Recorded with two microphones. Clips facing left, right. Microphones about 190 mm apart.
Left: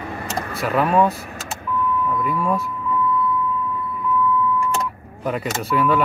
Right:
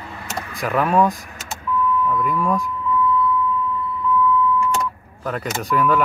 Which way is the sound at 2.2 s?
5° left (ahead or behind).